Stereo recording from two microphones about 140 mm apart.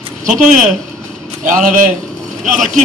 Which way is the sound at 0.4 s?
65° right (ahead or behind).